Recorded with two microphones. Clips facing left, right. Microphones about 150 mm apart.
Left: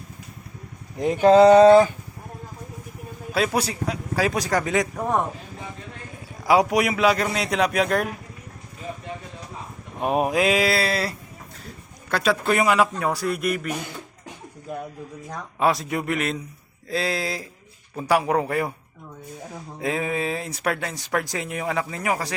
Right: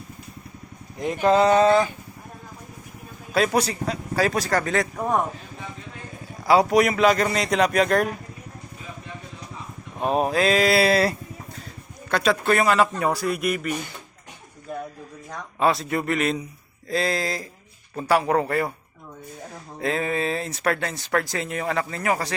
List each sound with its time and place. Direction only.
0.9 s speech: 30° left (ahead or behind)
3.3 s speech: 5° left (ahead or behind)
4.9 s speech: centre (ahead or behind)
6.4 s speech: 10° left (ahead or behind)
10.0 s speech: 10° left (ahead or behind)
12.1 s speech: 5° left (ahead or behind)
15.3 s speech: 10° left (ahead or behind)